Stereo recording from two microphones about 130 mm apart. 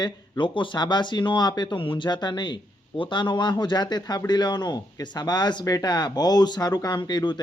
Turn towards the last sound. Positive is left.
turn(degrees=35)  # may be behind; listen again after turning